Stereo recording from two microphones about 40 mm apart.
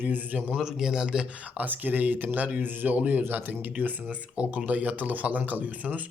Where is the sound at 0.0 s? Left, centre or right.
Right.